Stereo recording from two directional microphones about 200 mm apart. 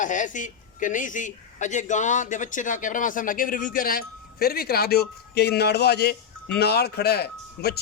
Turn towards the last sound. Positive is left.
turn(degrees=55)  # may be behind; listen again after turning